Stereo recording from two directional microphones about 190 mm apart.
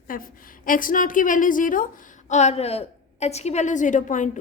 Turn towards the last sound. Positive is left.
turn(degrees=40)  # may be behind; listen again after turning